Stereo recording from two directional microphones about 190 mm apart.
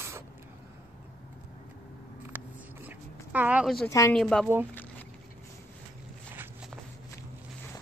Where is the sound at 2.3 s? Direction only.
10° right (ahead or behind).